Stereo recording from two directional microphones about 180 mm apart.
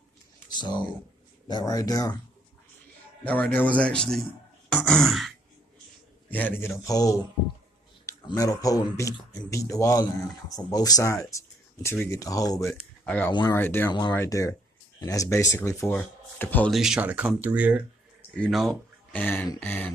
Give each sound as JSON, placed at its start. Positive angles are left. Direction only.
{"t": 0.6, "sound": "speech", "side_deg": 25}
{"t": 3.5, "sound": "speech", "side_deg": 5}
{"t": 6.3, "sound": "speech", "side_deg": 10}
{"t": 13.3, "sound": "speech", "side_deg": 25}
{"t": 13.6, "sound": "speech", "side_deg": 10}
{"t": 16.7, "sound": "speech", "side_deg": -5}
{"t": 18.4, "sound": "speech", "side_deg": 0}